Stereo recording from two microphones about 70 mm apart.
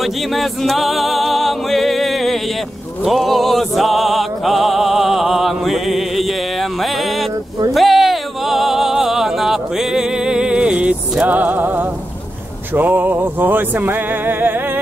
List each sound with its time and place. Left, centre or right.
0.0 s music: centre; by 14.8 s right